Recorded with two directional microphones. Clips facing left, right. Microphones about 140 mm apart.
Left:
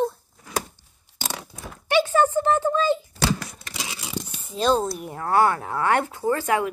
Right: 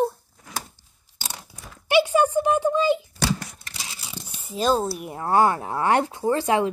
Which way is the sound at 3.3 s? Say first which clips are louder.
Left 2 dB; 90° left.